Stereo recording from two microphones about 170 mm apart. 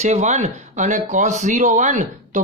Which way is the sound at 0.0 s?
40° right (ahead or behind).